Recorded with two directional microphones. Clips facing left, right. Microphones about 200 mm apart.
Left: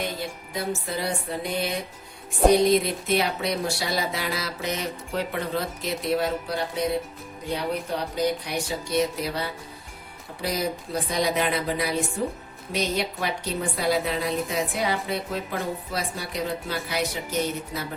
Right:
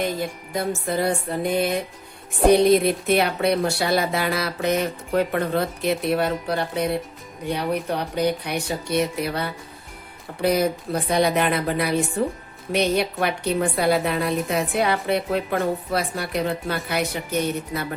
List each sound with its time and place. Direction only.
0.2 s music: 50° right (ahead or behind)
2.8 s a woman's voice: 60° right (ahead or behind)